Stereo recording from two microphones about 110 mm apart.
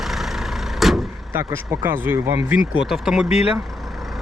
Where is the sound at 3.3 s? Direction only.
70° left (ahead or behind).